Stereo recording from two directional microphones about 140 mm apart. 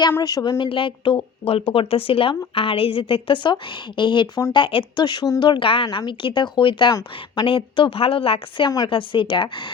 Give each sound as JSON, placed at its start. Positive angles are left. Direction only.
{"t": 0.2, "sound": "a woman's voice", "side_deg": 25}